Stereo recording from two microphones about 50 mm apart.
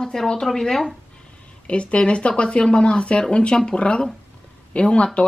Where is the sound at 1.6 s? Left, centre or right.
Left.